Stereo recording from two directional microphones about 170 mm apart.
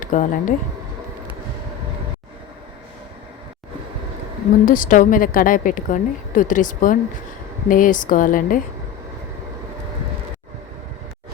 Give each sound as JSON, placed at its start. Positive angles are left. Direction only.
{"t": 0.0, "sound": "speech", "side_deg": 50}
{"t": 4.6, "sound": "a woman's voice", "side_deg": 50}